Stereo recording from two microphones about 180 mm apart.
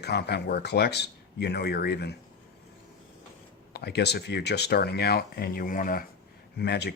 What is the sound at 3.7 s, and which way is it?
Speech, 65° left (ahead or behind).